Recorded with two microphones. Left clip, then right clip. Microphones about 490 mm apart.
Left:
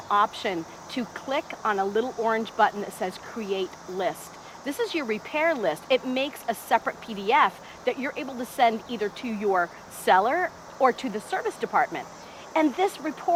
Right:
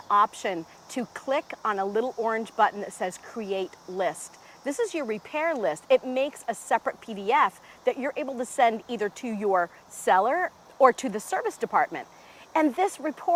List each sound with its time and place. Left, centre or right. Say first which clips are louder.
0.1 s speech: right 1 dB; right